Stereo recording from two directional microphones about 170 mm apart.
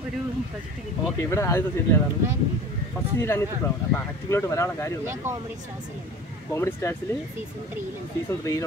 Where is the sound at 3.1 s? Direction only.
15° left (ahead or behind).